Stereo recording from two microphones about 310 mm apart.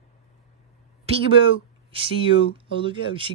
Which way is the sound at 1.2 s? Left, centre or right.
Centre.